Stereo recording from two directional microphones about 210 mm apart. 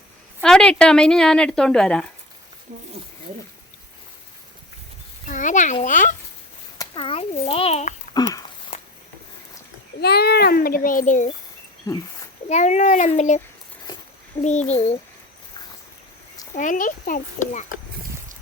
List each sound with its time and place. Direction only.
0.4 s speech: 5° left (ahead or behind)
5.2 s speech: 35° left (ahead or behind)
6.7 s a child's voice: 25° left (ahead or behind)
8.1 s a sound: 20° left (ahead or behind)
10.0 s a child's voice: 50° left (ahead or behind)
12.5 s speech: 35° left (ahead or behind)
14.4 s speech: 35° left (ahead or behind)
16.6 s speech: 40° left (ahead or behind)